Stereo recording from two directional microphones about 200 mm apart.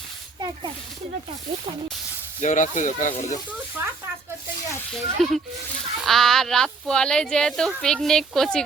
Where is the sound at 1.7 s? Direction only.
30° right (ahead or behind).